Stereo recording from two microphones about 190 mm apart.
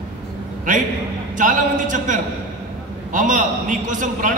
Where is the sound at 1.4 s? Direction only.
45° right (ahead or behind).